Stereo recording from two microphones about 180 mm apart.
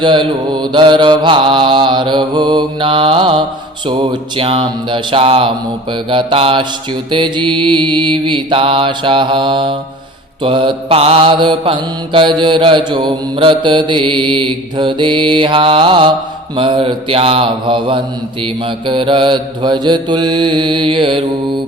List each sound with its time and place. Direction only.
0.0 s mantra: 25° right (ahead or behind)